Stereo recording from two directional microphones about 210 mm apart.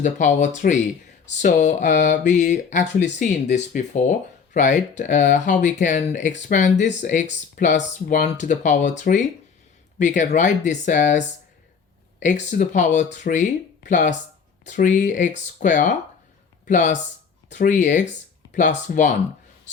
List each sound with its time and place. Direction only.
0.0 s speech: 35° left (ahead or behind)
12.2 s speech: 35° left (ahead or behind)